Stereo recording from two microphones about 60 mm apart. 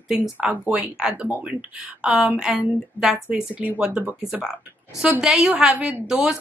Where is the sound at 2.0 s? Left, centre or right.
Centre.